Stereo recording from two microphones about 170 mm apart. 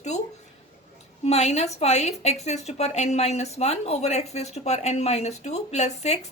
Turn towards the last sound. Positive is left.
turn(degrees=40)  # may be behind; listen again after turning